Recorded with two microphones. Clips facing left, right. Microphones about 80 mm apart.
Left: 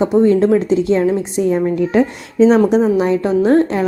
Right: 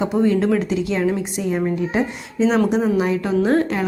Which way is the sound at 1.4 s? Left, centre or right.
Left.